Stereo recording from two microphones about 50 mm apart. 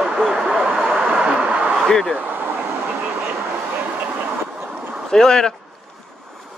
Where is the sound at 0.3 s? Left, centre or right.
Centre.